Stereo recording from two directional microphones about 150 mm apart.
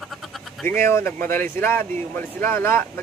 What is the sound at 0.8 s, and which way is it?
A man's voice, 15° left (ahead or behind).